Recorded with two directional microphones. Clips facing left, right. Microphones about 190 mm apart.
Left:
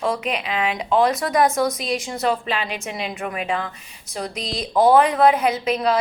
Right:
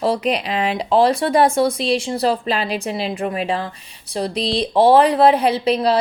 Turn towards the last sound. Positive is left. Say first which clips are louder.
# right 3 dB
turn(degrees=-35)  # may be behind; listen again after turning